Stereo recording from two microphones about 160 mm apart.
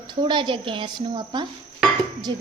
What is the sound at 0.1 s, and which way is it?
A woman's voice, 30° right (ahead or behind).